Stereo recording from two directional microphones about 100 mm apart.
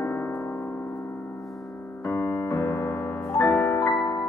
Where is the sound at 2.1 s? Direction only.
20° left (ahead or behind).